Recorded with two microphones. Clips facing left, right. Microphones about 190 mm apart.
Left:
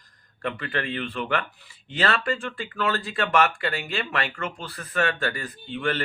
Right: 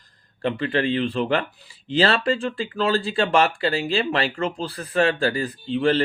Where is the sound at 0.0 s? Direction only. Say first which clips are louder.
Right 6 dB; 30° right (ahead or behind).